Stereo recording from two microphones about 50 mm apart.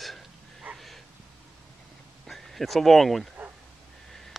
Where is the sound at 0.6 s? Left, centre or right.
Right.